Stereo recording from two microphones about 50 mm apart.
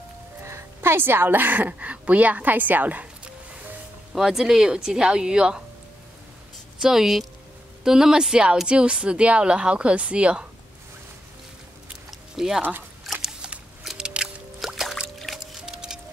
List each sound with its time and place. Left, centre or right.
0.4 s speech: right
4.1 s a woman's voice: centre
6.8 s a woman's voice: centre; by 10.4 s right
12.1 s a sound: centre
13.9 s music: centre
14.6 s music: centre